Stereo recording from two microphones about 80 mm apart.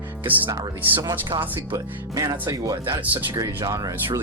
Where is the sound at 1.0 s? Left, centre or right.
Right.